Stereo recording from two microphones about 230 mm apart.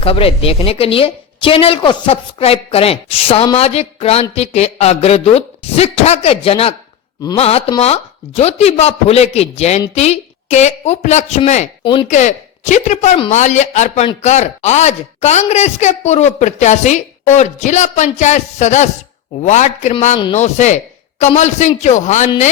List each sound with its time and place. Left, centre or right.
0.0 s a woman's voice: left